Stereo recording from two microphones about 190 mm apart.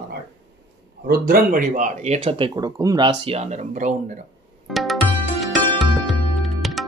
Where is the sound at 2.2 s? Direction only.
25° right (ahead or behind).